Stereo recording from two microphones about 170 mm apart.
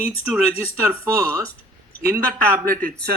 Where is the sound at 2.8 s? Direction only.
65° right (ahead or behind).